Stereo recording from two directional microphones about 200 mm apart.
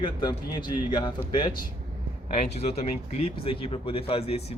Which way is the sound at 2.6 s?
30° left (ahead or behind).